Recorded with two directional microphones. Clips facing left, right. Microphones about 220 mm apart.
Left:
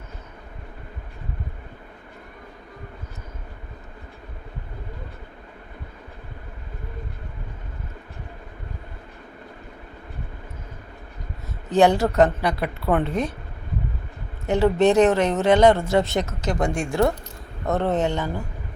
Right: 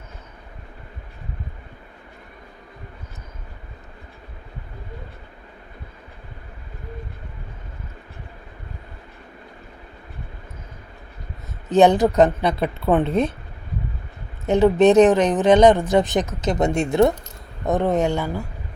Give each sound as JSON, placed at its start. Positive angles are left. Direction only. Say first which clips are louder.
{"t": 11.7, "sound": "speech", "louder": "right 3 dB", "side_deg": -20}
{"t": 14.4, "sound": "speech", "louder": "right 4 dB", "side_deg": -20}